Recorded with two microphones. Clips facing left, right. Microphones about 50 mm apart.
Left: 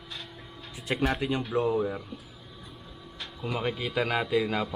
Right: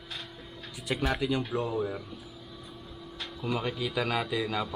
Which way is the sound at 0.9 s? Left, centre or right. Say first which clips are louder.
Left 2 dB; left.